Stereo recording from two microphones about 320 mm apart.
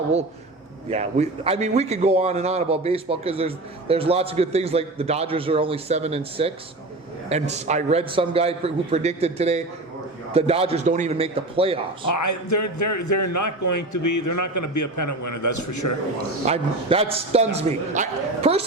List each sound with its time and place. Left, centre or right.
0.9 s a man's voice: centre
12.0 s a man's voice: left
16.5 s a man's voice: centre